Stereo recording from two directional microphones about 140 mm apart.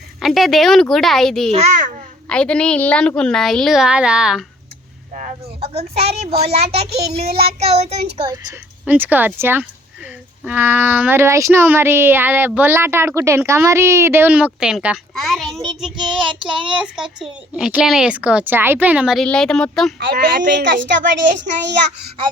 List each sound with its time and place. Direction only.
0.2 s a woman's voice: centre (ahead or behind)
1.5 s a child's voice: 50° right (ahead or behind)
2.3 s a woman's voice: 10° left (ahead or behind)
5.5 s child singing: 45° right (ahead or behind)
8.8 s a woman's voice: 10° right (ahead or behind)
16.1 s child singing: 35° right (ahead or behind)
16.6 s speech: 5° right (ahead or behind)
19.2 s a woman's voice: 5° left (ahead or behind)
20.0 s a woman's voice: 90° right